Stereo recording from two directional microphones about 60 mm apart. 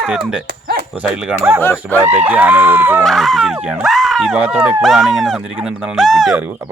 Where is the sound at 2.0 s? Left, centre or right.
Right.